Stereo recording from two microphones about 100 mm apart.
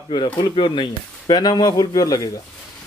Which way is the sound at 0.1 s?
55° left (ahead or behind).